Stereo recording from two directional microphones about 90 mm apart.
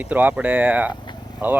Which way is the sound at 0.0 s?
20° right (ahead or behind).